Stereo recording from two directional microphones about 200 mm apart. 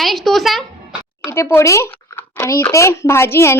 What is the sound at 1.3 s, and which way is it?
A child's voice, 15° left (ahead or behind).